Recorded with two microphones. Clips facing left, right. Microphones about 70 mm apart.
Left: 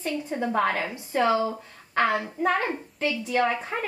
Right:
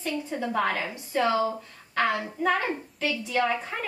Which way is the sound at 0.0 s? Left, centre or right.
Left.